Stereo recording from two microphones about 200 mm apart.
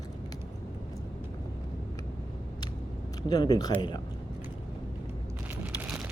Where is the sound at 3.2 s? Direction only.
20° left (ahead or behind).